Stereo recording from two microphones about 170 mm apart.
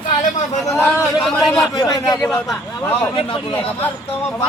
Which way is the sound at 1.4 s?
Centre (ahead or behind).